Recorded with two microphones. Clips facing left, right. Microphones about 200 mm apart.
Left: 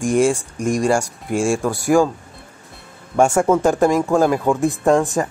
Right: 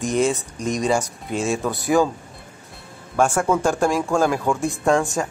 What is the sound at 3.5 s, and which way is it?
Speech, 20° left (ahead or behind).